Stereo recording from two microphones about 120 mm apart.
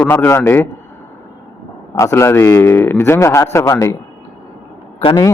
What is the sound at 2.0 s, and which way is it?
A man's voice, 25° left (ahead or behind).